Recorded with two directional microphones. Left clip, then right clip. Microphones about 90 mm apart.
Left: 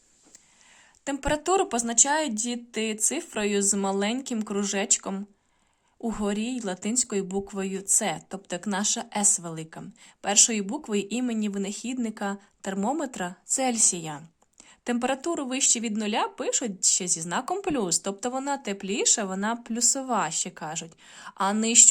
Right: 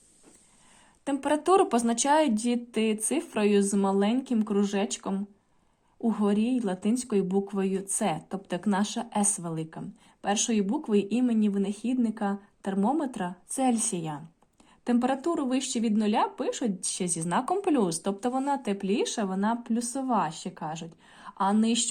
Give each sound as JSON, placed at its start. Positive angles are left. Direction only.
{"t": 1.1, "sound": "speech", "side_deg": 15}
{"t": 4.4, "sound": "a woman's voice", "side_deg": 25}
{"t": 6.3, "sound": "a woman's voice", "side_deg": 15}
{"t": 7.9, "sound": "a woman's voice", "side_deg": 10}
{"t": 13.7, "sound": "a woman's voice", "side_deg": 15}
{"t": 14.8, "sound": "speech", "side_deg": 25}
{"t": 17.0, "sound": "speech", "side_deg": 0}
{"t": 17.5, "sound": "speech", "side_deg": 15}